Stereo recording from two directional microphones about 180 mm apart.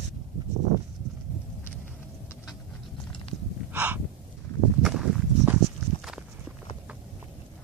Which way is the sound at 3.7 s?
10° right (ahead or behind).